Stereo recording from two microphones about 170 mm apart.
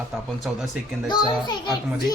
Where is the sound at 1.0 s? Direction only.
25° left (ahead or behind).